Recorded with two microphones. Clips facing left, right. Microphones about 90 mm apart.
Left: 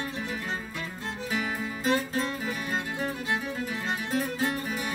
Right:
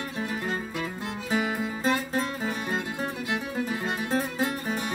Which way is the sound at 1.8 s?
30° right (ahead or behind).